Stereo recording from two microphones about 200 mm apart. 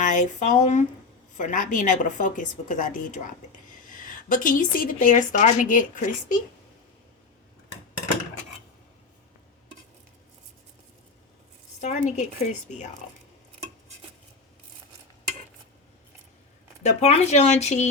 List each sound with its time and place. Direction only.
0.0 s a woman's voice: 40° left (ahead or behind)
11.8 s a woman's voice: 35° left (ahead or behind)
16.8 s a woman's voice: 35° left (ahead or behind)